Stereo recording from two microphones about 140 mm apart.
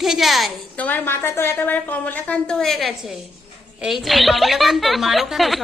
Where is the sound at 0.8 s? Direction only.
15° left (ahead or behind).